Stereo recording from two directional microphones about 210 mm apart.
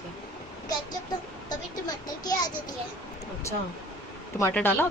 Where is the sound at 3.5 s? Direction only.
15° left (ahead or behind).